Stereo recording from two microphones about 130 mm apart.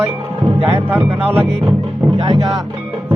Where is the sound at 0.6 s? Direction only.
15° right (ahead or behind).